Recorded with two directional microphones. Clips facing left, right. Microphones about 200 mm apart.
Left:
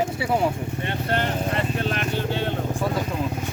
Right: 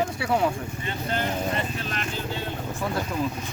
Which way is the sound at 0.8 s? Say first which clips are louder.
Left 4 dB; 65° left (ahead or behind).